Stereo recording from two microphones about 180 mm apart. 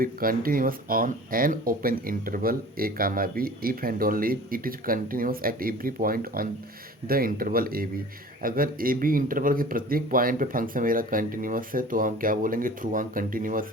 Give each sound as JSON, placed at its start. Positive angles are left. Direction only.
{"t": 0.0, "sound": "speech", "side_deg": -55}